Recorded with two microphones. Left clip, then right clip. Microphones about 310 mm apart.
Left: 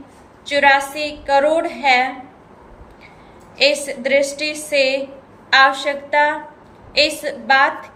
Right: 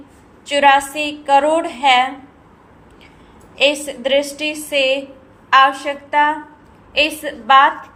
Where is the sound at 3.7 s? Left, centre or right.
Centre.